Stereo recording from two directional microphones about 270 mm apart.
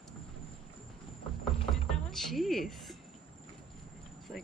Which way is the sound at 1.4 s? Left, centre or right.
Centre.